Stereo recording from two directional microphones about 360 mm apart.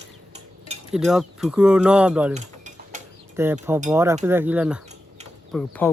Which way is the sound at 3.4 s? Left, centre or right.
Centre.